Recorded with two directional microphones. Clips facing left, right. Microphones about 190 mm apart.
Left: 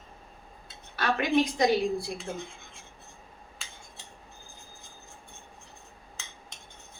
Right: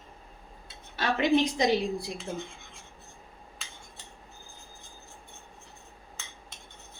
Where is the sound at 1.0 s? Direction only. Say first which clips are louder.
Right 1 dB; 25° right (ahead or behind).